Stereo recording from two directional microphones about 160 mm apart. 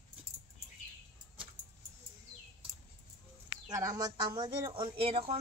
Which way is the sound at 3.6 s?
25° right (ahead or behind).